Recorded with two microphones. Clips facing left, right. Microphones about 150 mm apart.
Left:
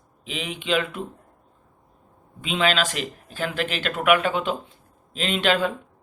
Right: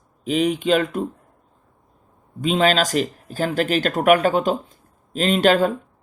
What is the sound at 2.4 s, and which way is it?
Speech, 40° right (ahead or behind).